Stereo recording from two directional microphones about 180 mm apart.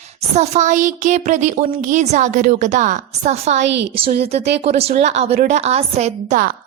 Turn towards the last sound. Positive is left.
turn(degrees=-45)  # may be behind; listen again after turning